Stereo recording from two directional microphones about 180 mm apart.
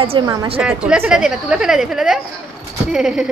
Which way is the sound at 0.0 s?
25° right (ahead or behind).